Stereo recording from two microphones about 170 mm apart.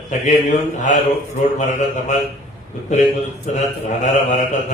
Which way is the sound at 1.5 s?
45° left (ahead or behind).